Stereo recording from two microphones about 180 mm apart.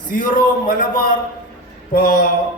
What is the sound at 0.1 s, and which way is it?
A man's voice, 50° left (ahead or behind).